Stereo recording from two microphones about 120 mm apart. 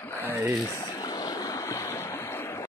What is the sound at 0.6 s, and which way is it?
Stream, 30° left (ahead or behind).